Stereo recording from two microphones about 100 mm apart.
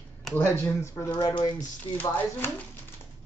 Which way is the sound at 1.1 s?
40° left (ahead or behind).